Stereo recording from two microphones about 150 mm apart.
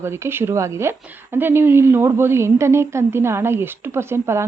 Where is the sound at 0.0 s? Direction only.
15° right (ahead or behind).